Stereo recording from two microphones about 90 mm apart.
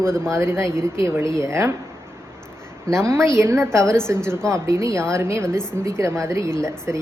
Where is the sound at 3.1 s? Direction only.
35° right (ahead or behind).